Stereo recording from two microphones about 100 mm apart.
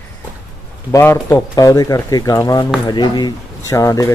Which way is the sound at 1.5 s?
35° left (ahead or behind).